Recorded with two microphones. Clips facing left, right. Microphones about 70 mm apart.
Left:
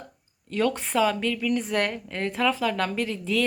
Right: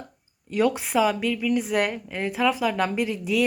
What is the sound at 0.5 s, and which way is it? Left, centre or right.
A woman's voice, centre.